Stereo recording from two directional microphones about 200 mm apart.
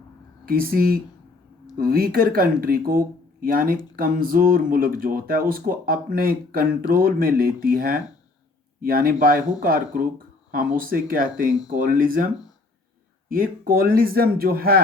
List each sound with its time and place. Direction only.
0.4 s speech: 45° right (ahead or behind)